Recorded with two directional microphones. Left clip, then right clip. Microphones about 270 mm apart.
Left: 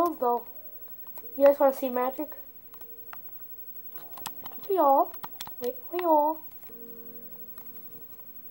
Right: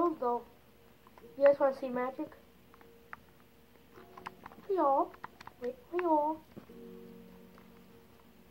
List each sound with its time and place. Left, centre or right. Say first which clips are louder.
0.0 s speech: left 6 dB; left
1.5 s a woman's voice: left 6 dB; left
3.9 s a sound: left 5 dB; left
4.7 s a child's voice: left 7 dB; left